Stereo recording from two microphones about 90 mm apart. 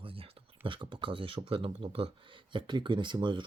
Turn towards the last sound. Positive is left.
turn(degrees=-60)  # may be behind; listen again after turning